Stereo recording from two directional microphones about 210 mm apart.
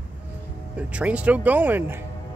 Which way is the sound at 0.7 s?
5° right (ahead or behind).